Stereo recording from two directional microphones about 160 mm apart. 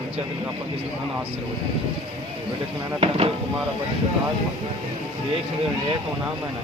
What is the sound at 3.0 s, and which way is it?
Speech, 35° right (ahead or behind).